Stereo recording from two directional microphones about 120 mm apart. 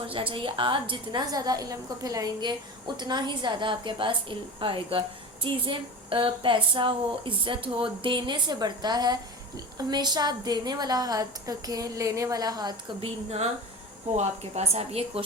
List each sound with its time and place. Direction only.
0.1 s a woman's voice: 50° right (ahead or behind)
13.0 s a woman's voice: 60° right (ahead or behind)